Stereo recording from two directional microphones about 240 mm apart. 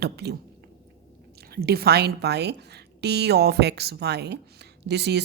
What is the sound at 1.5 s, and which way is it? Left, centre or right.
Speech, right.